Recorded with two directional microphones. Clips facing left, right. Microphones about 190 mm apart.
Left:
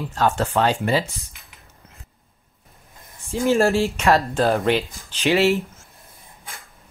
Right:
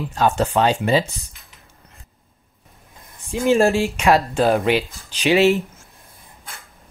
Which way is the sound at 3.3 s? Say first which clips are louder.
Right 2 dB; 15° right (ahead or behind).